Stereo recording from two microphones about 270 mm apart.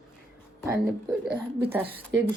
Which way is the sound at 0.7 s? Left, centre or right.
Centre.